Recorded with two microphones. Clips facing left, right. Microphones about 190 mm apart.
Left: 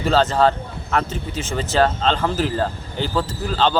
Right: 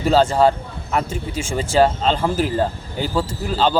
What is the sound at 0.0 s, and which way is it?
A man's voice, 10° right (ahead or behind).